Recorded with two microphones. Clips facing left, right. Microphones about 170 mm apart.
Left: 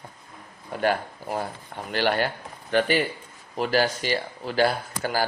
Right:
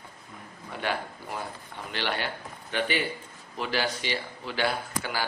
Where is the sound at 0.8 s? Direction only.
45° left (ahead or behind).